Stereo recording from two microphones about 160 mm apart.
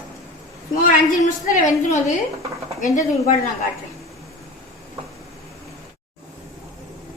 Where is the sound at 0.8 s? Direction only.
50° left (ahead or behind).